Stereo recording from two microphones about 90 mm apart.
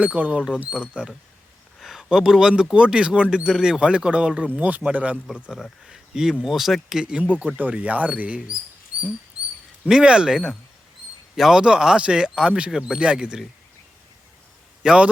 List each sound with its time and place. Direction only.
0.0 s speech: 15° right (ahead or behind)
5.3 s speech: 5° right (ahead or behind)
9.8 s speech: 10° right (ahead or behind)
14.8 s speech: 10° right (ahead or behind)